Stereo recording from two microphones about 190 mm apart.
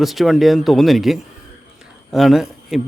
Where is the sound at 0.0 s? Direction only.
Centre (ahead or behind).